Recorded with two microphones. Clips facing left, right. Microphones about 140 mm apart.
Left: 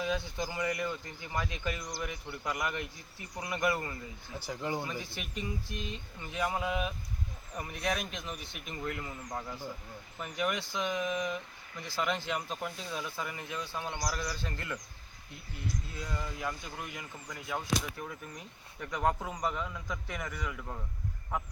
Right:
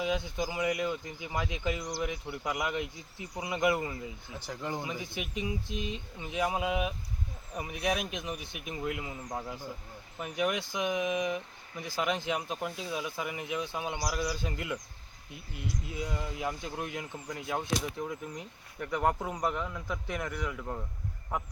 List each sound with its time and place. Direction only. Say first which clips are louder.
0.0 s speech: right 2 dB; 15° right (ahead or behind)
4.4 s speech: left 1 dB; 5° left (ahead or behind)
4.8 s speech: right 2 dB; 15° right (ahead or behind)
15.9 s speech: right 3 dB; 20° right (ahead or behind)